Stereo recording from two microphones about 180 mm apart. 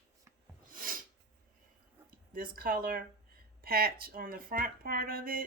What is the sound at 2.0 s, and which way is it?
Speech, 55° right (ahead or behind).